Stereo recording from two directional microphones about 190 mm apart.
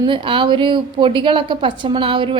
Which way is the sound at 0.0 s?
25° right (ahead or behind).